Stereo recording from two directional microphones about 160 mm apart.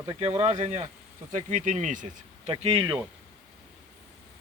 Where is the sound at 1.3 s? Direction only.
50° right (ahead or behind).